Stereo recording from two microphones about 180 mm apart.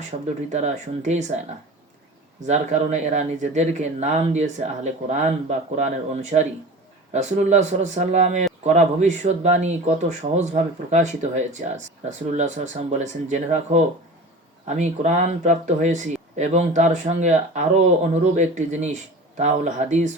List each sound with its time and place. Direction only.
0.1 s speech: 40° right (ahead or behind)
2.5 s speech: 40° right (ahead or behind)
7.1 s speech: 40° right (ahead or behind)